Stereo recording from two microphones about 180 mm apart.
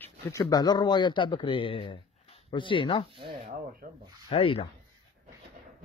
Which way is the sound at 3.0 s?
30° right (ahead or behind).